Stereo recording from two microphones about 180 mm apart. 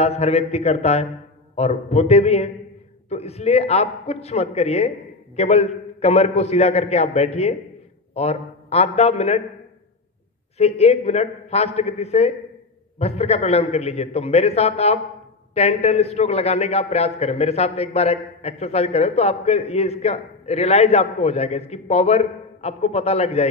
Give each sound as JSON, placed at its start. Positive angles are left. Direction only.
{"t": 0.0, "sound": "a man's voice", "side_deg": 35}
{"t": 10.6, "sound": "a man's voice", "side_deg": 35}